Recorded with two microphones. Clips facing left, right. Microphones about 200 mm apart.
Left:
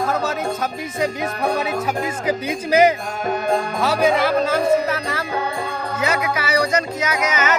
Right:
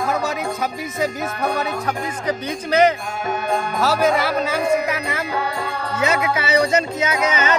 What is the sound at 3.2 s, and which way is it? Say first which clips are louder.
Music: left 2 dB; 40° left (ahead or behind).